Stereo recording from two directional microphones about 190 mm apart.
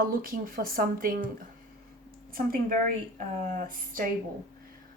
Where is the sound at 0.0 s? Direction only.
50° right (ahead or behind).